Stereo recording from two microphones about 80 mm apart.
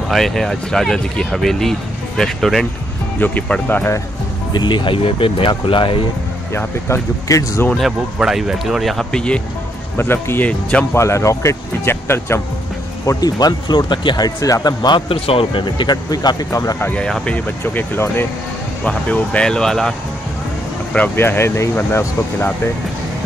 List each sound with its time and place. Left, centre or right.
0.1 s speech: centre
3.2 s speech: centre
4.5 s speech: left
6.5 s speech: left
8.2 s speech: centre
9.1 s speech: centre
9.9 s speech: left
13.2 s speech: left
15.5 s speech: left
16.1 s speech: left
16.4 s speech: left
17.0 s speech: centre; by 18.2 s left
18.9 s speech: centre
21.2 s speech: left